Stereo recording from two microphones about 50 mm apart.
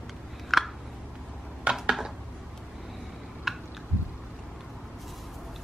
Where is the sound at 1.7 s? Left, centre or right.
Right.